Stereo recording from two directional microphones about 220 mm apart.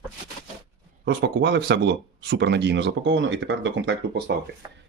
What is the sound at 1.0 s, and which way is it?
Speech, 50° right (ahead or behind).